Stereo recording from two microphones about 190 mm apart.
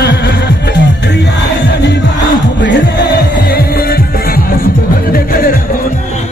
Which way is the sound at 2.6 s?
65° left (ahead or behind).